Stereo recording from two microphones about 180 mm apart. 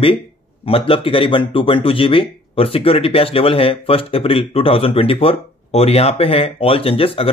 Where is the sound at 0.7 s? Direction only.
30° left (ahead or behind).